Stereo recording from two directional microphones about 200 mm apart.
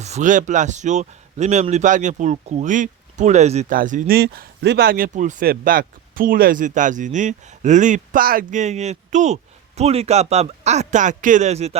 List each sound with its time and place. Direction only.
0.0 s speech: 35° right (ahead or behind)